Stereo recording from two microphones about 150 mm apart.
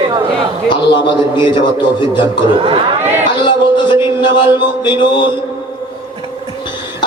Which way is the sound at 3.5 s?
30° left (ahead or behind).